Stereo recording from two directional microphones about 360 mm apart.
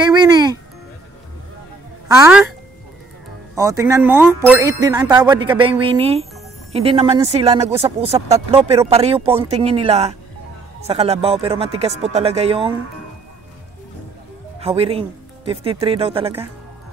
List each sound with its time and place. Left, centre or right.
0.0 s music: centre
2.0 s speech: centre
3.5 s speech: centre
14.6 s speech: centre